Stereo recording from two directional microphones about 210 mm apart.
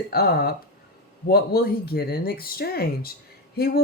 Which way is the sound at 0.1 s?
45° left (ahead or behind).